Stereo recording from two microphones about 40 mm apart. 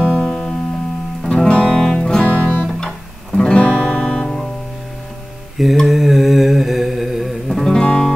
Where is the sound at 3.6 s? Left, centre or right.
Left.